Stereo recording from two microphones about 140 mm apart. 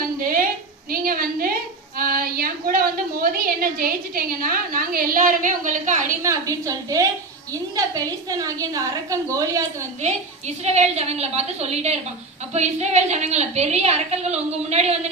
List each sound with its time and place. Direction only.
0.0 s a sound: 90° right
2.0 s a woman's voice: 90° right; by 6.1 s 65° right (ahead or behind)
6.2 s a woman's voice: 25° right (ahead or behind)
10.0 s a woman's voice: 55° right (ahead or behind)